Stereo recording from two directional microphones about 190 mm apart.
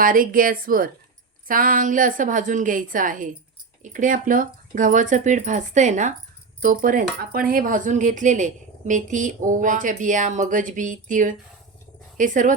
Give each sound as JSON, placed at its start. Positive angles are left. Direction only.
{"t": 0.0, "sound": "speech", "side_deg": -45}